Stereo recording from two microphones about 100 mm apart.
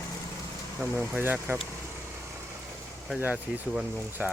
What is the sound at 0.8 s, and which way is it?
Speech, 25° right (ahead or behind).